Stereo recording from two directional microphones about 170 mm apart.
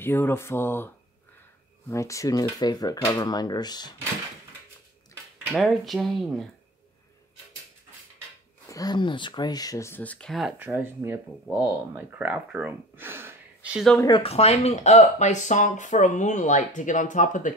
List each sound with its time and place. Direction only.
0.0 s speech: 10° left (ahead or behind)
5.5 s cutlery: centre (ahead or behind)
8.6 s speech: 20° left (ahead or behind); by 10.5 s centre (ahead or behind)
10.6 s speech: 10° right (ahead or behind)
14.0 s speech: 30° left (ahead or behind); by 17.6 s 50° left (ahead or behind)